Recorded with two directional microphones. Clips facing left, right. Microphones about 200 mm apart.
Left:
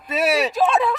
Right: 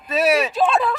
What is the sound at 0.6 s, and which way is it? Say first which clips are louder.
Speech: even; centre (ahead or behind).